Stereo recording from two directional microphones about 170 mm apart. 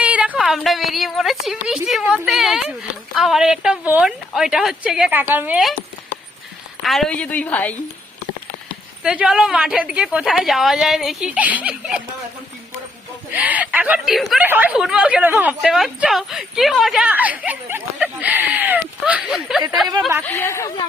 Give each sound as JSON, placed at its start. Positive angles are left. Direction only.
{"t": 0.0, "sound": "a woman's voice", "side_deg": -10}
{"t": 6.8, "sound": "a woman's voice", "side_deg": 0}
{"t": 9.0, "sound": "a woman's voice", "side_deg": -5}
{"t": 13.3, "sound": "speech", "side_deg": -10}
{"t": 20.2, "sound": "a woman's voice", "side_deg": 15}